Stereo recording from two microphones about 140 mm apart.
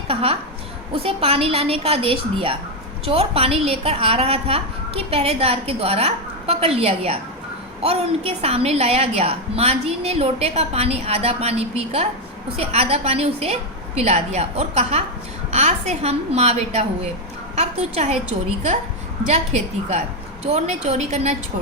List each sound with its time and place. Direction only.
0.1 s a woman's voice: 40° right (ahead or behind)
20.5 s a woman's voice: 50° right (ahead or behind)